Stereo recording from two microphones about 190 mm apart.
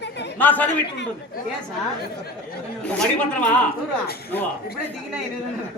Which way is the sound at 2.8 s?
5° left (ahead or behind).